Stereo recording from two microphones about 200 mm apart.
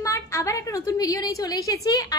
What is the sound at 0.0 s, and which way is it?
A woman's voice, 15° left (ahead or behind).